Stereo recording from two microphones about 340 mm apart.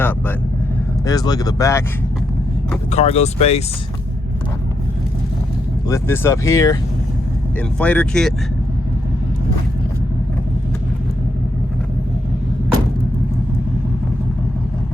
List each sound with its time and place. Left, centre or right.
0.0 s speech: centre
2.9 s speech: centre
5.9 s speech: centre
7.8 s speech: centre